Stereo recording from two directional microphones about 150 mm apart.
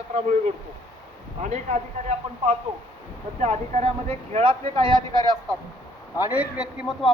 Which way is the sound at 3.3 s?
45° right (ahead or behind).